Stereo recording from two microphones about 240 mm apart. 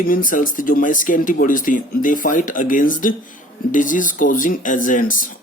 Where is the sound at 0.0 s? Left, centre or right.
Left.